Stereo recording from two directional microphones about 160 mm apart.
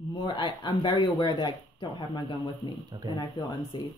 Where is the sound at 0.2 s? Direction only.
30° left (ahead or behind).